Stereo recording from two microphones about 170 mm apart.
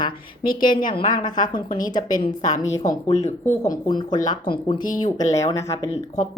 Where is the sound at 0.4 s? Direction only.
55° left (ahead or behind).